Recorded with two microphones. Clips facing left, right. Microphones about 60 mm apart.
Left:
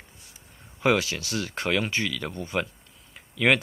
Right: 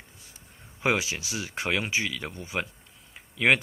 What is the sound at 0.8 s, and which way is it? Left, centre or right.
Speech, centre.